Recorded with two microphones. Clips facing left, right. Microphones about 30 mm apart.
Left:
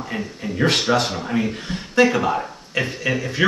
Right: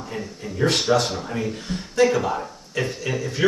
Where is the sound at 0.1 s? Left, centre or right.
Left.